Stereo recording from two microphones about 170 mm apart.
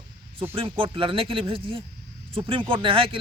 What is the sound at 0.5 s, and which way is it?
Speech, 30° right (ahead or behind).